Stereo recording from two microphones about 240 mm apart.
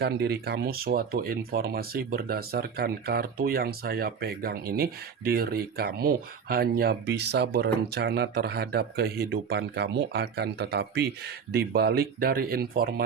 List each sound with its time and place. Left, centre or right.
0.0 s speech: right